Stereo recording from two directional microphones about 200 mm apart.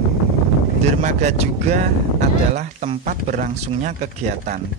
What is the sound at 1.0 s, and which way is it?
Speech, 35° right (ahead or behind).